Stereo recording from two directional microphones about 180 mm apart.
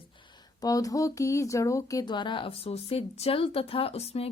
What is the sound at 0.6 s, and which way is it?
Speech, 20° left (ahead or behind).